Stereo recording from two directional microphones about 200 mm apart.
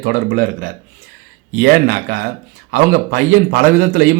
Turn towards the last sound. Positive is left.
turn(degrees=-45)  # may be behind; listen again after turning